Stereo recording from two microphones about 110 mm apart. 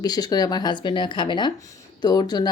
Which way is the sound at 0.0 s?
35° left (ahead or behind).